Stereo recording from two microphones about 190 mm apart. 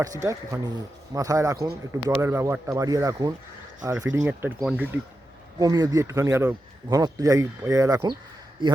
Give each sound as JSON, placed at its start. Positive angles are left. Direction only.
{"t": 0.0, "sound": "speech", "side_deg": -15}
{"t": 5.5, "sound": "a man's voice", "side_deg": -20}